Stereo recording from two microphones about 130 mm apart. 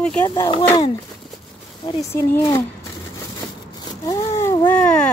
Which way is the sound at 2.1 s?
20° left (ahead or behind).